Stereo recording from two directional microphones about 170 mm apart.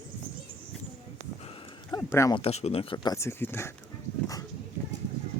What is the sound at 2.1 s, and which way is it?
Speech, 20° left (ahead or behind).